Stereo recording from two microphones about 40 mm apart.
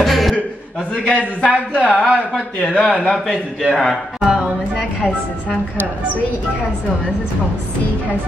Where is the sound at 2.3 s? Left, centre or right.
Right.